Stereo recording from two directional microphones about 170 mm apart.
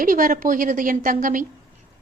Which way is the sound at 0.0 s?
55° right (ahead or behind).